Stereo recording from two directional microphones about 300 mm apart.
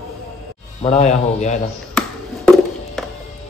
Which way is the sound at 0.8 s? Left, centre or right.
Left.